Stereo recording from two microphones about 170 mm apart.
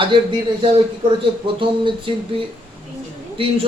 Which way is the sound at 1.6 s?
30° right (ahead or behind).